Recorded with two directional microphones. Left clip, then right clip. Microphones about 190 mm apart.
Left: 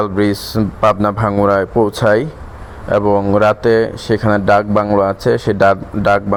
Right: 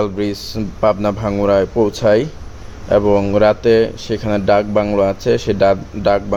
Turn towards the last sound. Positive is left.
turn(degrees=20)  # may be behind; listen again after turning